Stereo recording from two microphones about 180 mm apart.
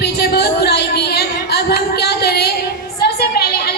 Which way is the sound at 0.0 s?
65° left (ahead or behind).